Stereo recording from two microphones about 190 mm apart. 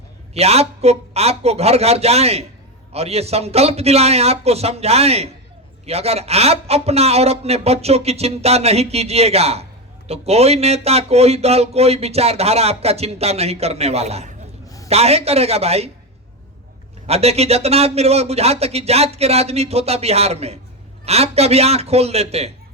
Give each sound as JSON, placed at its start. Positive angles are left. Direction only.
{"t": 0.3, "sound": "speech", "side_deg": -35}
{"t": 17.1, "sound": "speech", "side_deg": -35}